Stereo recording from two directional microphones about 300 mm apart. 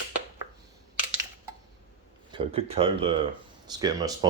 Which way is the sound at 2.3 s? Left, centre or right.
Centre.